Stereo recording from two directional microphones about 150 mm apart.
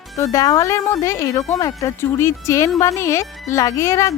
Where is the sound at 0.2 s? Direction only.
25° left (ahead or behind).